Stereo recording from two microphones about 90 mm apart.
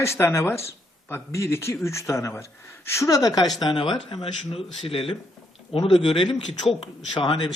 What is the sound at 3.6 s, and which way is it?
A man's voice, 65° left (ahead or behind).